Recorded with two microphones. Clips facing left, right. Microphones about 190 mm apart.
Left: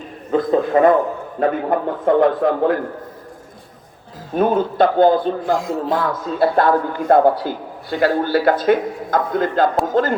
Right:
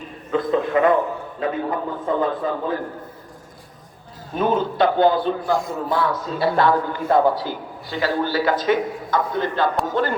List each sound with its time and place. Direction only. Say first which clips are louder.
0.3 s a man's voice: left 4 dB; 35° left (ahead or behind)
1.4 s a man's voice: left 6 dB; 65° left (ahead or behind)
4.4 s speech: left 4 dB; 50° left (ahead or behind)
5.4 s speech: left 3 dB; 90° left
6.0 s speech: left 3 dB; 50° left (ahead or behind)